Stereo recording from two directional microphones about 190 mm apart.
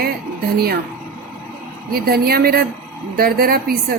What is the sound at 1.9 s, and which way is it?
Speech, 55° right (ahead or behind).